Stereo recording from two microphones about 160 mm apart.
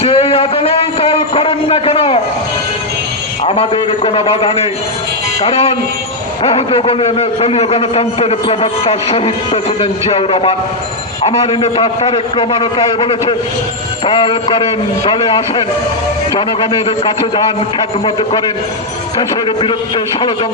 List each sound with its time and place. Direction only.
0.0 s a man's voice: 35° left (ahead or behind)
3.4 s a man's voice: 35° left (ahead or behind)
17.0 s a man's voice: 30° left (ahead or behind)